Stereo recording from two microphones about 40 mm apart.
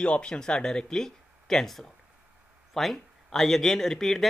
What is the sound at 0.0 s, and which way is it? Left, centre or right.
Speech, left.